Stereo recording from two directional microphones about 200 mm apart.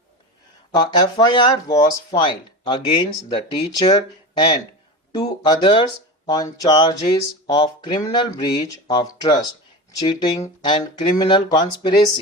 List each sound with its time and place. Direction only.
0.8 s speech: 20° left (ahead or behind)